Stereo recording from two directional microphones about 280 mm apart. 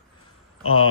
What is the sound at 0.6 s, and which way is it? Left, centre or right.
Speech, left.